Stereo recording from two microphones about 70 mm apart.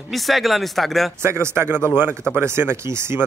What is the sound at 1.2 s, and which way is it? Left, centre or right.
Speech, right.